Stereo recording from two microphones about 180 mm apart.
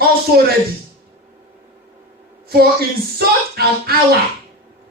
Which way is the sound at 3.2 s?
60° right (ahead or behind).